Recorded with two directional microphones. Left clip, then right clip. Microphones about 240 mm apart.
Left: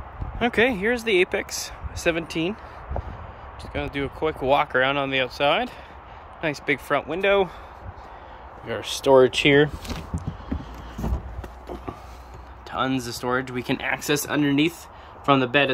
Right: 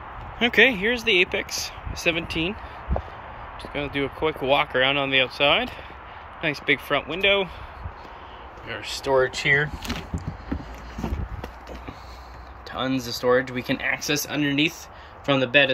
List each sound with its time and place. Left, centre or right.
0.4 s speech: centre
3.7 s speech: centre
8.6 s speech: left
12.7 s speech: centre